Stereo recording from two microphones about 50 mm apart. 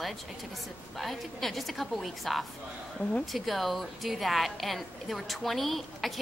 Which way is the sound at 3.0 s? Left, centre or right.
Left.